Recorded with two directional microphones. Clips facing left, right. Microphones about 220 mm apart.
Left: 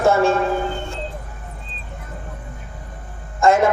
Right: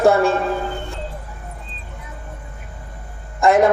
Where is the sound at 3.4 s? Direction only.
20° right (ahead or behind).